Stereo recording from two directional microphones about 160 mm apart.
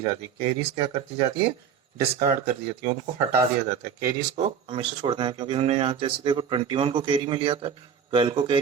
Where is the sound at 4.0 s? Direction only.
45° right (ahead or behind).